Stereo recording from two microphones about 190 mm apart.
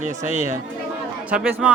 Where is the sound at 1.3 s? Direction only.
5° right (ahead or behind).